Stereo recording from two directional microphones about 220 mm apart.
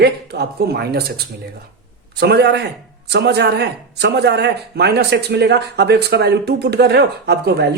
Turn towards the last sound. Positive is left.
turn(degrees=-50)  # may be behind; listen again after turning